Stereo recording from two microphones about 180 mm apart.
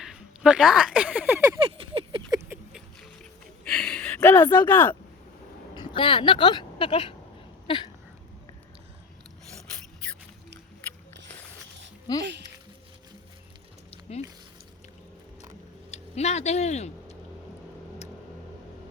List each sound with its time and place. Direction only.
0.0 s speech: 5° right (ahead or behind)
1.8 s patter: 30° right (ahead or behind)
3.6 s a sound: 5° left (ahead or behind)
4.5 s speech: 10° left (ahead or behind)
5.7 s speech: 25° left (ahead or behind)
12.2 s speech: 75° right (ahead or behind)
13.9 s music: 35° left (ahead or behind)
15.9 s speech: 40° left (ahead or behind)